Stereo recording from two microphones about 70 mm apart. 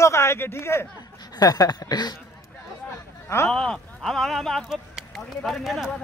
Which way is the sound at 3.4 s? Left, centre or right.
Centre.